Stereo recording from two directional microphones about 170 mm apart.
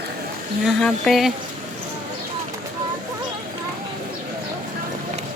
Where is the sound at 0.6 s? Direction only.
5° left (ahead or behind).